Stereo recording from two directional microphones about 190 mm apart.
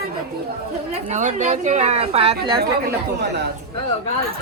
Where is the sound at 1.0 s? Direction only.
35° right (ahead or behind).